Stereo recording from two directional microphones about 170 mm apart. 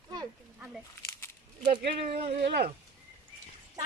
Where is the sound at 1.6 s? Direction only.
45° right (ahead or behind).